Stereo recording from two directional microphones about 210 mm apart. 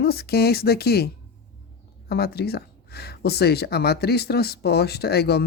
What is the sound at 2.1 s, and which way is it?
Speech, 50° left (ahead or behind).